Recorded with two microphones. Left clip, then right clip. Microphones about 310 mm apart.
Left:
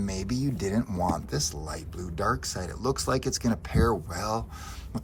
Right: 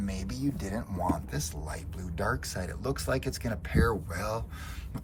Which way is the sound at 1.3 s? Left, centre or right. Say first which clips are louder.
Left 6 dB; centre.